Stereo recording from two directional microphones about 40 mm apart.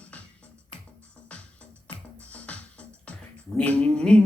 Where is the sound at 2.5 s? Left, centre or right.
Left.